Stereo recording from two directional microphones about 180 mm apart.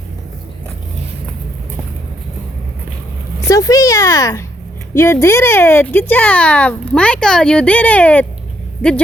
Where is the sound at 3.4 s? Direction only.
20° left (ahead or behind).